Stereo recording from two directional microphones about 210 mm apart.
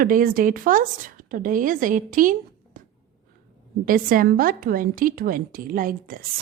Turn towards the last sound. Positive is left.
turn(degrees=-40)  # may be behind; listen again after turning